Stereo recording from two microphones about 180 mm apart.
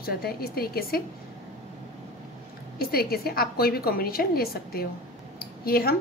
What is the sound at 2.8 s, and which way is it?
A woman's voice, 60° left (ahead or behind).